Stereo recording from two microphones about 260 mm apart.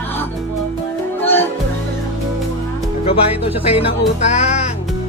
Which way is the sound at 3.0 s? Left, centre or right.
Left.